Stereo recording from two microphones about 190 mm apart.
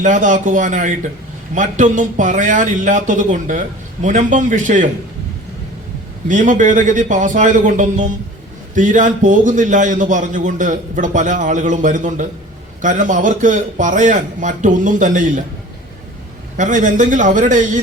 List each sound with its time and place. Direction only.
0.0 s a man's voice: 40° right (ahead or behind)
6.2 s a man's voice: 40° right (ahead or behind)
16.6 s a man's voice: 40° right (ahead or behind)